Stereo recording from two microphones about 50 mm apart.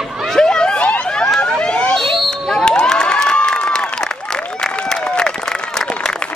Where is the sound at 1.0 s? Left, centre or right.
Centre.